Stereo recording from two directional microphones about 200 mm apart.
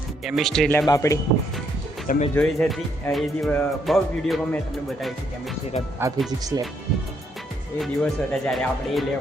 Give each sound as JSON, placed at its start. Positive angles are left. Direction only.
{"t": 0.3, "sound": "music", "side_deg": 0}
{"t": 0.9, "sound": "speech", "side_deg": 15}
{"t": 2.0, "sound": "speech", "side_deg": 35}
{"t": 2.3, "sound": "music", "side_deg": 5}
{"t": 6.0, "sound": "speech", "side_deg": -15}
{"t": 7.8, "sound": "music", "side_deg": 5}